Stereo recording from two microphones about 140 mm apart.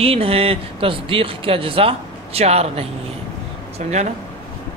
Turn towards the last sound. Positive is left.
turn(degrees=-55)  # may be behind; listen again after turning